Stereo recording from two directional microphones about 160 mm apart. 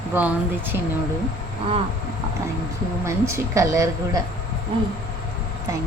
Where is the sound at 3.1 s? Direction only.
20° right (ahead or behind).